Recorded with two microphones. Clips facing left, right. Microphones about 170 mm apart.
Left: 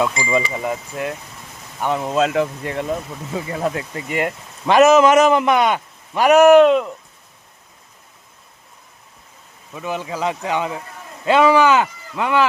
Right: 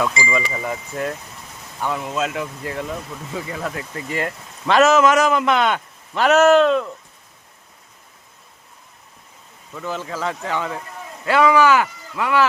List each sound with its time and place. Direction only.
0.1 s speech: centre (ahead or behind)
0.3 s speech: 20° left (ahead or behind)
9.7 s speech: 15° left (ahead or behind)